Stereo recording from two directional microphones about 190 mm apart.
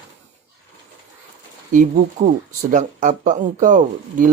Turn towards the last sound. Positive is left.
turn(degrees=-40)  # may be behind; listen again after turning